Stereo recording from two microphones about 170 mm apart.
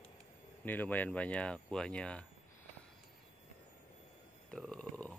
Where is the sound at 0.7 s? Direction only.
10° left (ahead or behind).